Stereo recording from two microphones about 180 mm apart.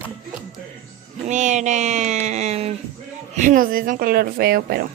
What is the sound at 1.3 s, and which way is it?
A woman's voice, 45° right (ahead or behind).